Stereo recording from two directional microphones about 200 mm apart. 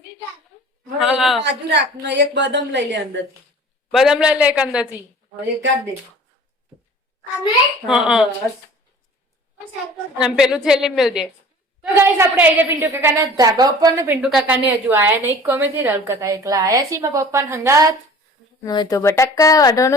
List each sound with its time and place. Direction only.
0.9 s a man's voice: 5° right (ahead or behind)
1.5 s a woman's voice: 60° right (ahead or behind)
3.9 s a woman's voice: 5° right (ahead or behind)
7.9 s a woman's voice: 5° right (ahead or behind)
10.2 s a woman's voice: 5° right (ahead or behind)
14.2 s a woman's voice: 5° right (ahead or behind)
18.6 s speech: 20° left (ahead or behind)